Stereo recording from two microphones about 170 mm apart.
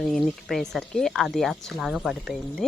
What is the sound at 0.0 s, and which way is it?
Speech, centre (ahead or behind).